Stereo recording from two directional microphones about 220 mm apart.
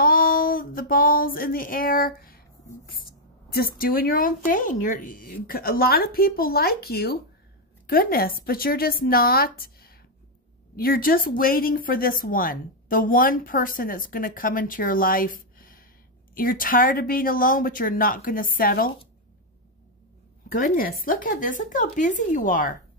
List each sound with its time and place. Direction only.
0.0 s a sound: 40° left (ahead or behind)
2.9 s speech: 45° left (ahead or behind)
20.4 s speech: 40° left (ahead or behind)